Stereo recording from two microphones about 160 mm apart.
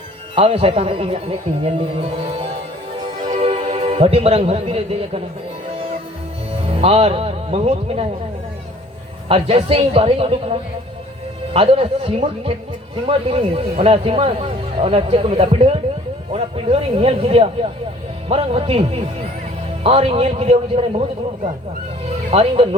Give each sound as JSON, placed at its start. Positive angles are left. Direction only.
{"t": 0.3, "sound": "speech", "side_deg": -40}
{"t": 6.5, "sound": "speech", "side_deg": -40}
{"t": 9.3, "sound": "speech", "side_deg": -40}